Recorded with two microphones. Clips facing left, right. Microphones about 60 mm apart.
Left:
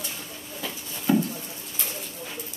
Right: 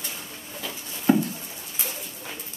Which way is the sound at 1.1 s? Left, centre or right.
Right.